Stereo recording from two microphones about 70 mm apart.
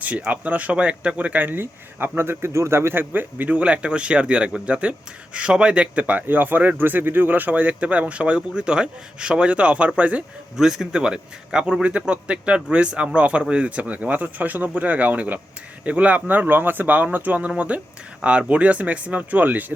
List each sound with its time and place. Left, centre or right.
0.0 s speech: right
10.6 s a man's voice: centre; by 19.7 s right